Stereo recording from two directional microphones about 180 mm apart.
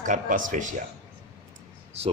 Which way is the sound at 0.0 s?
45° right (ahead or behind).